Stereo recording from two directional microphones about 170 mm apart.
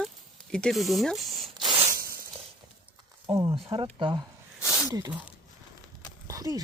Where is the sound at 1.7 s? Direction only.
30° right (ahead or behind).